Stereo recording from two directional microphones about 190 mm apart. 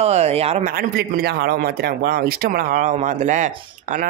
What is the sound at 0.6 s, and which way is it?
Speech, 50° right (ahead or behind).